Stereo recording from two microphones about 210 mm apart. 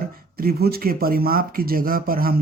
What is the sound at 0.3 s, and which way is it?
Speech, 45° right (ahead or behind).